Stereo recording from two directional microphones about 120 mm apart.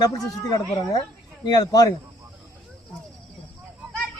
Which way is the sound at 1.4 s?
35° left (ahead or behind).